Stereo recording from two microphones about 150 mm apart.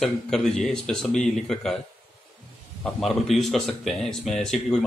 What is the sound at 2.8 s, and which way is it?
Speech, centre (ahead or behind).